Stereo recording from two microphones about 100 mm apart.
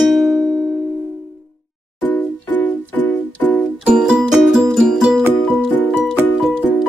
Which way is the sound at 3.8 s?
10° right (ahead or behind).